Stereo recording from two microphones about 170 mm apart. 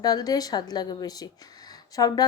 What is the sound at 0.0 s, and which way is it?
A woman's voice, 25° left (ahead or behind).